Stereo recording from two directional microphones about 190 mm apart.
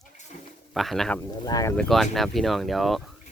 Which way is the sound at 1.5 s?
20° left (ahead or behind).